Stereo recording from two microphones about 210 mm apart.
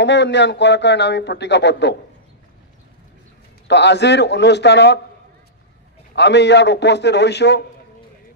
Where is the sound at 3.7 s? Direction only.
55° left (ahead or behind).